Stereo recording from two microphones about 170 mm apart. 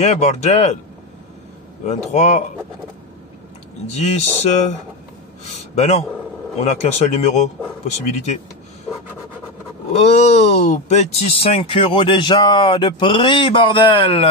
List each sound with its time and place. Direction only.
0.0 s speech: 40° left (ahead or behind)
1.9 s speech: 40° left (ahead or behind)
3.9 s speech: 40° left (ahead or behind)
9.9 s speech: 40° left (ahead or behind)